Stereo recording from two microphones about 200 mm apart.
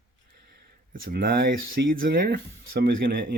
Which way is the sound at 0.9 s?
50° right (ahead or behind).